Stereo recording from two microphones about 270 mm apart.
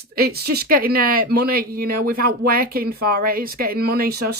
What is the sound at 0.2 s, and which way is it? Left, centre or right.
Speech, right.